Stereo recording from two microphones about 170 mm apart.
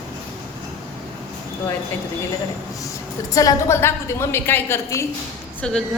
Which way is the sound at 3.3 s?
20° left (ahead or behind).